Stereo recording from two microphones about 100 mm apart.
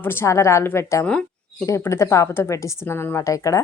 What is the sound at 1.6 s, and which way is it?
Speech, 30° left (ahead or behind).